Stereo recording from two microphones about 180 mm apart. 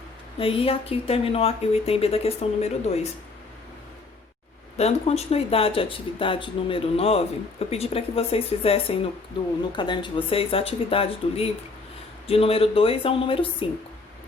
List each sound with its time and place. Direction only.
0.3 s speech: 30° left (ahead or behind)
4.8 s speech: 35° left (ahead or behind)